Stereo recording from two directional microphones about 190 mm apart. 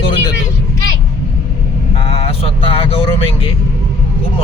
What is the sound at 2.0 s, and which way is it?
Vehicle, 30° left (ahead or behind).